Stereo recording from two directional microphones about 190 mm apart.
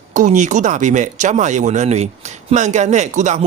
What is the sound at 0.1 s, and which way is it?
Speech, 40° right (ahead or behind).